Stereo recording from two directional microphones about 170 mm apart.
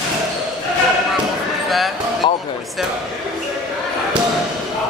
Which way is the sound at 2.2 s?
30° left (ahead or behind).